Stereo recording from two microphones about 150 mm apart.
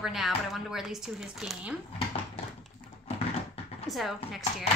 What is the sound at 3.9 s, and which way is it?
Speech, centre (ahead or behind).